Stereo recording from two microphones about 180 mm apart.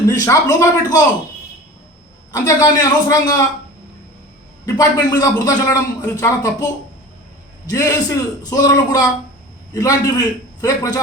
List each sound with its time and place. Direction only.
0.1 s a man's voice: 20° left (ahead or behind)
2.3 s a man's voice: 20° left (ahead or behind)
4.6 s a man's voice: 20° left (ahead or behind)
7.7 s a man's voice: 20° left (ahead or behind)